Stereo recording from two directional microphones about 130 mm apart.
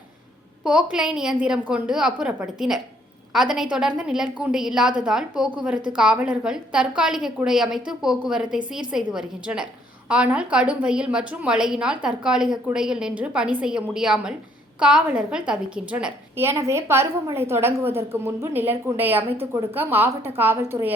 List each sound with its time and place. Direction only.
0.6 s a woman's voice: 5° right (ahead or behind)
16.4 s a woman's voice: 20° right (ahead or behind)